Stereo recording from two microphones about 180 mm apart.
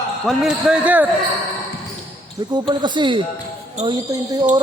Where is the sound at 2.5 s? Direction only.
25° right (ahead or behind).